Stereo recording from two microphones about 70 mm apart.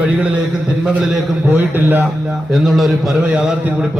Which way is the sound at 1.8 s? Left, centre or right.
Right.